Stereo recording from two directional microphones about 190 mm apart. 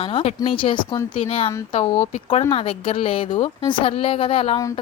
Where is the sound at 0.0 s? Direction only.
30° left (ahead or behind).